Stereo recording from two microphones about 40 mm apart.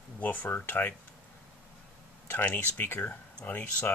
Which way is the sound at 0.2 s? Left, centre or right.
Left.